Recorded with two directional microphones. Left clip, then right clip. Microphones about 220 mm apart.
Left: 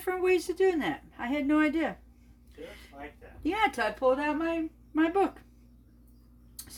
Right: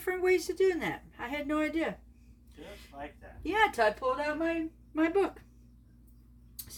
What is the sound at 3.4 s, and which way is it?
Speech, 25° left (ahead or behind).